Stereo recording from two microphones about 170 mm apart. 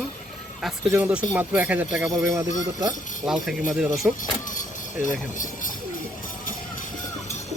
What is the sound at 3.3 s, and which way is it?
Speech, centre (ahead or behind).